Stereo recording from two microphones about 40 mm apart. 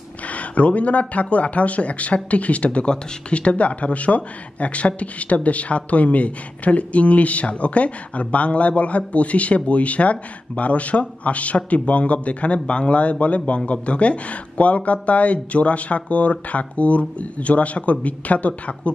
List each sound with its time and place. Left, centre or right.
0.3 s speech: left